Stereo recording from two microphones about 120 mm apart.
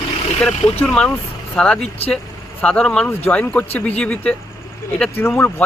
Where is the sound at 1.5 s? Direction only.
5° left (ahead or behind).